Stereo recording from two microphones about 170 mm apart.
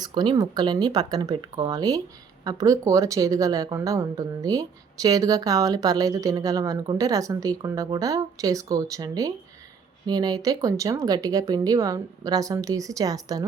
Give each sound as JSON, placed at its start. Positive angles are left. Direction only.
{"t": 0.0, "sound": "speech", "side_deg": -25}